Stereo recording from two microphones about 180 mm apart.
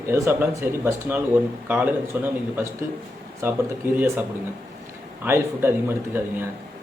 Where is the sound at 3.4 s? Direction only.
15° right (ahead or behind).